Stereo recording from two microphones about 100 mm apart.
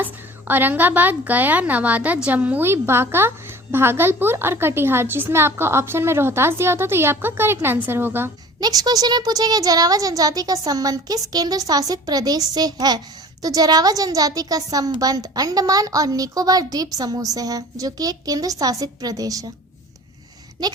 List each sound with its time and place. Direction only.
0.0 s a woman's voice: 20° right (ahead or behind)
8.6 s a woman's voice: 40° right (ahead or behind)